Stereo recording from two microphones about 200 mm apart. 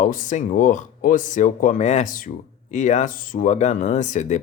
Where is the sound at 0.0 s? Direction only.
40° left (ahead or behind).